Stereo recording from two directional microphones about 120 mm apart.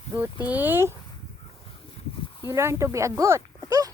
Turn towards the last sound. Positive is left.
turn(degrees=-30)  # may be behind; listen again after turning